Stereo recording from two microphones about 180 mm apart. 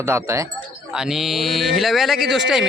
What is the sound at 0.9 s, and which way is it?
Speech, 5° right (ahead or behind).